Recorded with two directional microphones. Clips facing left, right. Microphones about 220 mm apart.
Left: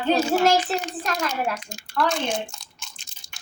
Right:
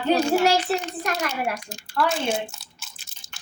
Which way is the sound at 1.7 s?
5° right (ahead or behind).